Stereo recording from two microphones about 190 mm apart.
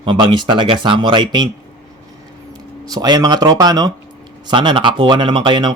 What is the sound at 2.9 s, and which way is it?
Speech, 20° right (ahead or behind).